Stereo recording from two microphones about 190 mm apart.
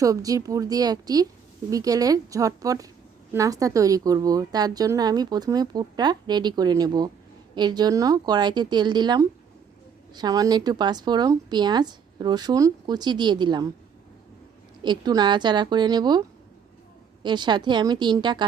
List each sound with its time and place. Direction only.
0.0 s a woman's voice: 20° right (ahead or behind)
14.8 s speech: 20° right (ahead or behind)
17.2 s speech: 25° right (ahead or behind)